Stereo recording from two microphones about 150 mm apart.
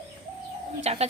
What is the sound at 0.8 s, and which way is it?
Speech, 45° right (ahead or behind).